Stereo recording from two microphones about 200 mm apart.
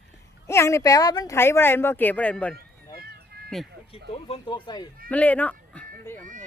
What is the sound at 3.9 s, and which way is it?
Speech, 25° left (ahead or behind).